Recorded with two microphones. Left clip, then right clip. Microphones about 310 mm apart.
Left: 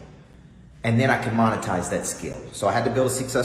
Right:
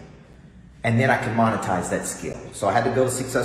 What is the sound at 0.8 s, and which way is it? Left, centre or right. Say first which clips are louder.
A man's voice: right 1 dB; centre.